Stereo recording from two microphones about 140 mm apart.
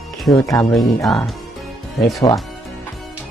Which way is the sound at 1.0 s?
Centre (ahead or behind).